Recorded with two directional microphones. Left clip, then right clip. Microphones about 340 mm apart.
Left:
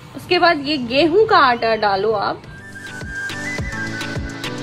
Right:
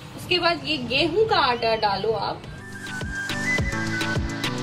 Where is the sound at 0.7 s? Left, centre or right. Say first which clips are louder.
Left 6 dB; centre.